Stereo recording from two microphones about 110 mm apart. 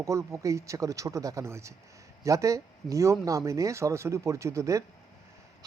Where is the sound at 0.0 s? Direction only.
25° right (ahead or behind).